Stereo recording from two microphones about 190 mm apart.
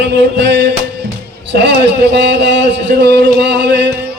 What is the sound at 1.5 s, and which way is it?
Speech, 65° right (ahead or behind).